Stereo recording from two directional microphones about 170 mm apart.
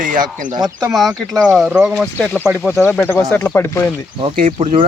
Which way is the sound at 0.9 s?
Centre (ahead or behind).